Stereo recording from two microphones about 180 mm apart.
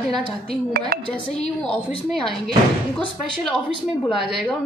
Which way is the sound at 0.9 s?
60° right (ahead or behind).